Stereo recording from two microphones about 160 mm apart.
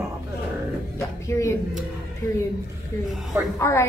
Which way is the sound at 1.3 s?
15° left (ahead or behind).